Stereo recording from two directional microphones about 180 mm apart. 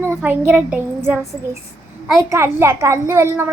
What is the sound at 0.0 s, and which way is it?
A child's voice, 10° right (ahead or behind).